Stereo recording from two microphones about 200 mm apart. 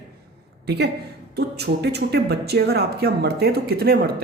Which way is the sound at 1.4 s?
55° right (ahead or behind).